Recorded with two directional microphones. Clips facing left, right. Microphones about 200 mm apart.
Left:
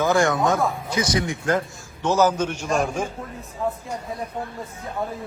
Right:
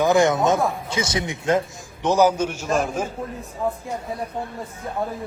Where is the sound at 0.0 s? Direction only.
20° right (ahead or behind); by 3.1 s 5° right (ahead or behind).